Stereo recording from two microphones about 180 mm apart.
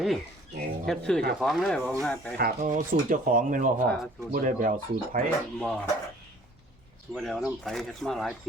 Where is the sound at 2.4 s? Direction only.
50° right (ahead or behind).